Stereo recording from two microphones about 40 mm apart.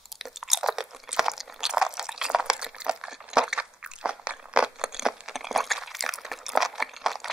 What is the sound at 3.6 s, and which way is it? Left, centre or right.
Crunch, right.